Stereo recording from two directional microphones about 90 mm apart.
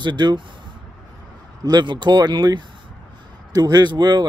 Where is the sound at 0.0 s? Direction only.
55° right (ahead or behind).